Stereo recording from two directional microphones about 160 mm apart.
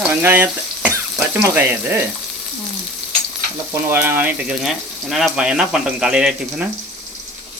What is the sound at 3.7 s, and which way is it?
Speech, 15° right (ahead or behind).